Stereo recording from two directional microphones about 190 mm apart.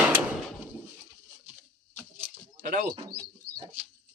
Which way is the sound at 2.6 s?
45° right (ahead or behind).